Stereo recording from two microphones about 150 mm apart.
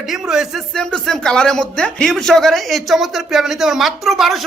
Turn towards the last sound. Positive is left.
turn(degrees=0)  # may be behind; listen again after turning